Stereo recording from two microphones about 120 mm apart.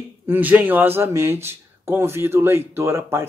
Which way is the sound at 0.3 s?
15° right (ahead or behind).